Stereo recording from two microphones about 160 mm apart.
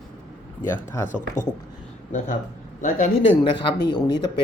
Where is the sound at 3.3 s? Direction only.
30° left (ahead or behind).